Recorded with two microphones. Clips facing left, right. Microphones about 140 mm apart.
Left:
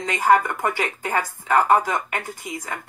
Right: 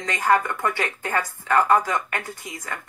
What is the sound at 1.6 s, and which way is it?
Speech, 45° left (ahead or behind).